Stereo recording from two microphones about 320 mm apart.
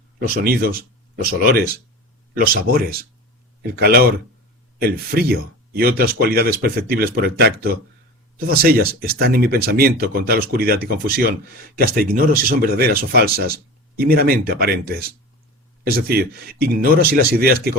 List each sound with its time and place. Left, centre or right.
0.4 s speech: right